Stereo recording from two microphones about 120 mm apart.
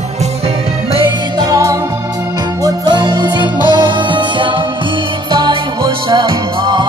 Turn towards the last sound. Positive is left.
turn(degrees=-40)  # may be behind; listen again after turning